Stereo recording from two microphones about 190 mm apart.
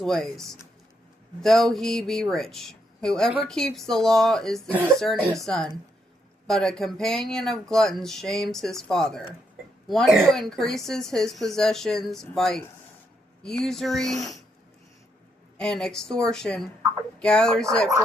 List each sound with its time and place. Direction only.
0.0 s speech: centre (ahead or behind)
15.5 s speech: 5° left (ahead or behind)